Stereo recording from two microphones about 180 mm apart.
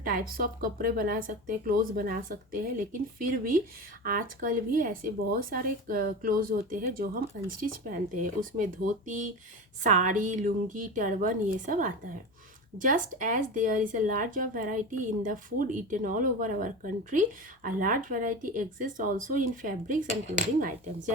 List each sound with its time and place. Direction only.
0.0 s speech: 50° right (ahead or behind)